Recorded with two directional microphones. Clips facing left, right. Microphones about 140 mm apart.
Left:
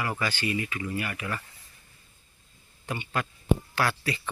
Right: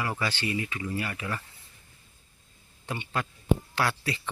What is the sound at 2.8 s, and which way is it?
Speech, 25° right (ahead or behind).